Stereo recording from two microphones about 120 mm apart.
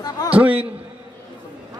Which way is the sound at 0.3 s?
10° right (ahead or behind).